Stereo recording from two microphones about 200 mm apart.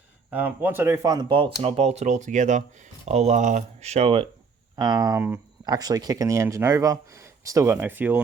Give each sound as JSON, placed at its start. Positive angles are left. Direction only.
{"t": 0.3, "sound": "speech", "side_deg": -10}